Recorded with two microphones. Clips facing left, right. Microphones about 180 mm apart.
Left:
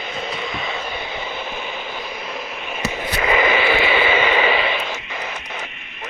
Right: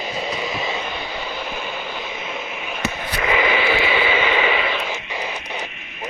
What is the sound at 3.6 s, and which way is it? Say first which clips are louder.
Vehicle: left 2 dB; 60° left (ahead or behind).